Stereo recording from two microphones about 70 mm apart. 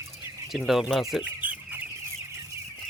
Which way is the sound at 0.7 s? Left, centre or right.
Centre.